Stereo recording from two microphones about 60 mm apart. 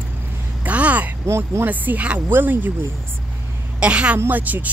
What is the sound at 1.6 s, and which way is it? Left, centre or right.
A woman's voice, right.